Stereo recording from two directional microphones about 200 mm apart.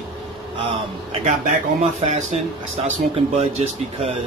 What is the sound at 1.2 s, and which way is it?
Speech, 35° right (ahead or behind).